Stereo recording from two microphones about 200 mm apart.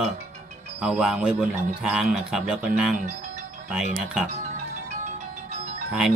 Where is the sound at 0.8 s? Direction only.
5° right (ahead or behind).